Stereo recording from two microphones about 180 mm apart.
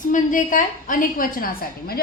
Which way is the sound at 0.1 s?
45° left (ahead or behind).